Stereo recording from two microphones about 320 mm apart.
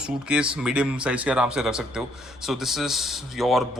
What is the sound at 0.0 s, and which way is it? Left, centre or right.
Speech, centre.